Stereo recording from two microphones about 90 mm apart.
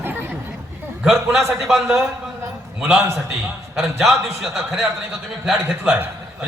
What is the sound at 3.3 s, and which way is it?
A man's voice, centre (ahead or behind).